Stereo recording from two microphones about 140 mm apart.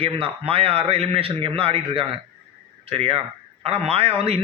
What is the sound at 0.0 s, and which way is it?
A man's voice, 40° right (ahead or behind).